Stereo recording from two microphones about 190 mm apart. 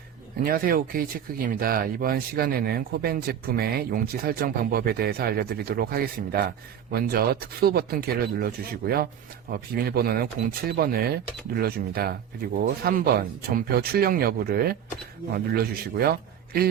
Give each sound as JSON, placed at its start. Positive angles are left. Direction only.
{"t": 0.4, "sound": "speech", "side_deg": -50}